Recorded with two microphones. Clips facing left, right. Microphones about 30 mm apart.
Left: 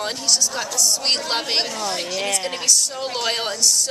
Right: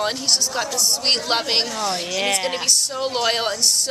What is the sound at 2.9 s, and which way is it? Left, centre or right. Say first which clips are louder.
Speech: right 3 dB; centre.